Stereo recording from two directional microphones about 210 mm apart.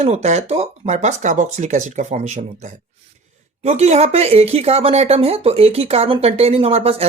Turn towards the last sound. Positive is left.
turn(degrees=-25)  # may be behind; listen again after turning